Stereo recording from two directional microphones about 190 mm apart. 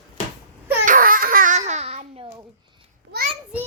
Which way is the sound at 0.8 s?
45° right (ahead or behind).